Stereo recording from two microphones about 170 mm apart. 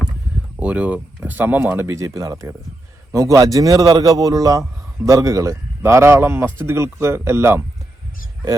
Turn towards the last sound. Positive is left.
turn(degrees=-15)  # may be behind; listen again after turning